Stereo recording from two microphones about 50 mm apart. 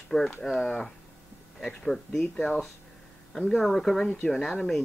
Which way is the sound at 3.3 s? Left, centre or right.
Centre.